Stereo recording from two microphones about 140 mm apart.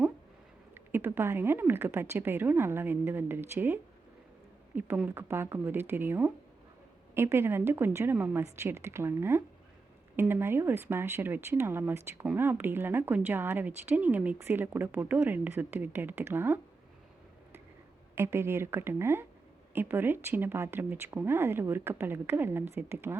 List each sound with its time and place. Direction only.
0.7 s speech: 15° right (ahead or behind)
18.1 s speech: 20° right (ahead or behind)